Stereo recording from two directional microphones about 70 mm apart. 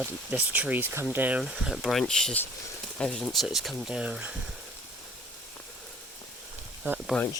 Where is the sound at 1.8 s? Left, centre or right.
Centre.